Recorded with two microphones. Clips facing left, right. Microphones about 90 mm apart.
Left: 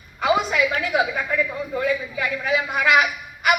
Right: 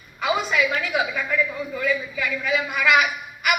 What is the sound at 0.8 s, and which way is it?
A man's voice, 30° left (ahead or behind).